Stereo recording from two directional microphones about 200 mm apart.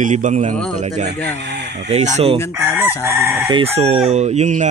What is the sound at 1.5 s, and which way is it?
Speech, 55° right (ahead or behind).